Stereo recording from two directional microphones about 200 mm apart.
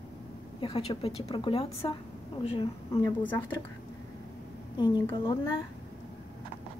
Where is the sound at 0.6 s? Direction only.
25° left (ahead or behind).